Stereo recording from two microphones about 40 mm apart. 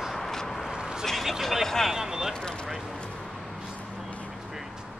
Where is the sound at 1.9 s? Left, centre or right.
Centre.